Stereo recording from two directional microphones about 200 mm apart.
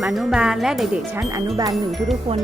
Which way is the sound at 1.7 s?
Centre (ahead or behind).